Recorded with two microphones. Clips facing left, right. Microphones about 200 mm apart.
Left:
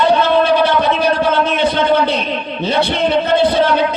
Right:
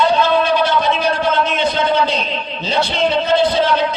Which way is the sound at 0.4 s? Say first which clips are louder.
Left 3 dB; 60° left (ahead or behind).